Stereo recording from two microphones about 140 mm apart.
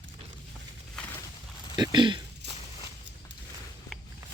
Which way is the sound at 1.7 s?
30° right (ahead or behind).